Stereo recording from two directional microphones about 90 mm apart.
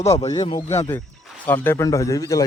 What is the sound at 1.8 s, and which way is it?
Speech, 35° left (ahead or behind).